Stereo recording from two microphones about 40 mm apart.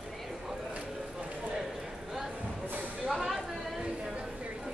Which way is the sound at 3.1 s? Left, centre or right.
Centre.